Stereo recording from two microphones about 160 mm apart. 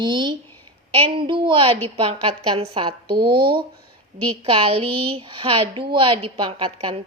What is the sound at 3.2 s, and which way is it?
Speech, 75° right (ahead or behind).